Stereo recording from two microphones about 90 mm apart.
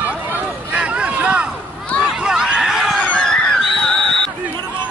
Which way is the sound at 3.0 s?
10° left (ahead or behind).